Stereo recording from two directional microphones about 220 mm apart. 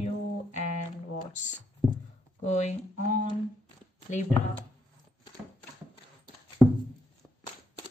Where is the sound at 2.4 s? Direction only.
30° left (ahead or behind).